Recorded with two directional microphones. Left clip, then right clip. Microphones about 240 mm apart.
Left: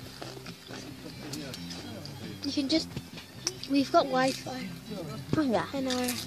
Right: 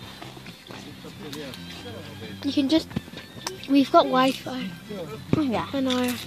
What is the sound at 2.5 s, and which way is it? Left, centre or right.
Speech, right.